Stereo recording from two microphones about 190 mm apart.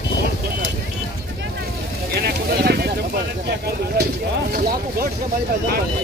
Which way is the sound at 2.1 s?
55° right (ahead or behind).